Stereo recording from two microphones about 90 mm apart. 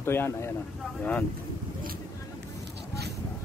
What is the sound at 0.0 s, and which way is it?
Speech, 25° left (ahead or behind).